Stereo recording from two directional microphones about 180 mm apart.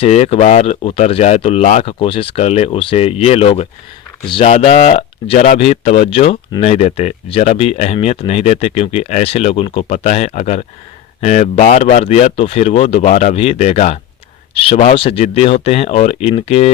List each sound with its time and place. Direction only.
0.0 s speech: 35° left (ahead or behind)